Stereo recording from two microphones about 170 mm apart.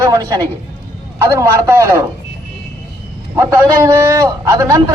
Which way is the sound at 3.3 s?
15° right (ahead or behind).